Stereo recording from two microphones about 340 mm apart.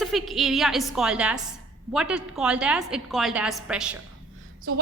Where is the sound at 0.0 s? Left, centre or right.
Centre.